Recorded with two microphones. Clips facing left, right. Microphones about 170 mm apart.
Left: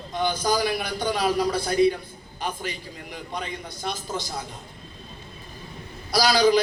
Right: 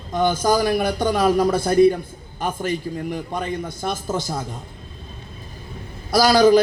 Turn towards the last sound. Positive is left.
turn(degrees=-50)  # may be behind; listen again after turning